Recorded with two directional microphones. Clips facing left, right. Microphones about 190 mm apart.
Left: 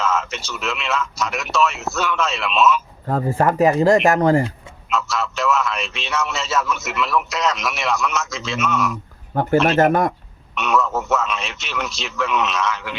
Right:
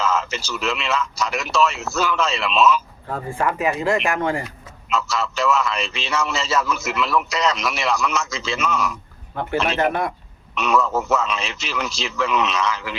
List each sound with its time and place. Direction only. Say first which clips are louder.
0.0 s a man's voice: even; centre (ahead or behind)
3.1 s speech: left 5 dB; 40° left (ahead or behind)
4.9 s a man's voice: even; centre (ahead or behind)
9.3 s speech: left 6 dB; 40° left (ahead or behind)
10.5 s a man's voice: even; centre (ahead or behind)